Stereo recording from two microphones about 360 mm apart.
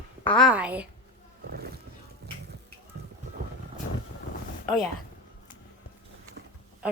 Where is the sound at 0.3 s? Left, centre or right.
Centre.